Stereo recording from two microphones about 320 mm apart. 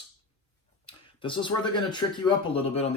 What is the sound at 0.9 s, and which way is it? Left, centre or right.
Speech, centre.